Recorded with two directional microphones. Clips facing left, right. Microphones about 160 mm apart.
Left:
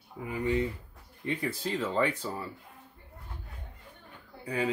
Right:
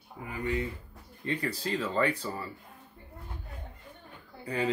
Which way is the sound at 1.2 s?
15° left (ahead or behind).